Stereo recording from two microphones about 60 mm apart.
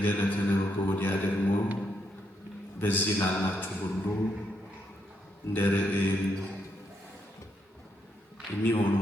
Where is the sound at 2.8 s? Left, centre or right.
Left.